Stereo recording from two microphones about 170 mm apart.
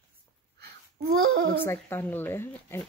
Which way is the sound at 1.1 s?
65° right (ahead or behind).